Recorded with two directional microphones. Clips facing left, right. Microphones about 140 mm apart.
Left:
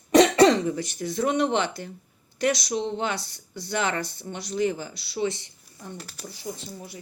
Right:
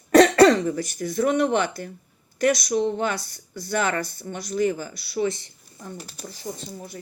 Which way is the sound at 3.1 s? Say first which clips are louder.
Right 1 dB; 45° right (ahead or behind).